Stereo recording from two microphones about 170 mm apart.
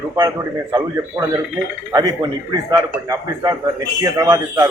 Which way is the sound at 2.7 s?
20° right (ahead or behind).